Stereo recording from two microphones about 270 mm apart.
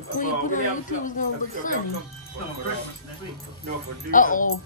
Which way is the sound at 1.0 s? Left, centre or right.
Left.